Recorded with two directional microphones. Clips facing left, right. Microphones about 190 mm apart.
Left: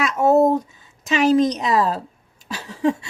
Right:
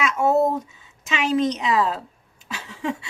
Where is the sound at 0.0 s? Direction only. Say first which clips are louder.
Left 4 dB; 40° left (ahead or behind).